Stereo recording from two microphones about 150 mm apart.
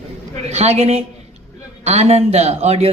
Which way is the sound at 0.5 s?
45° right (ahead or behind).